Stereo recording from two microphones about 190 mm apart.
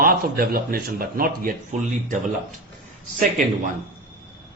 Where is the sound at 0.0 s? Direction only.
50° right (ahead or behind).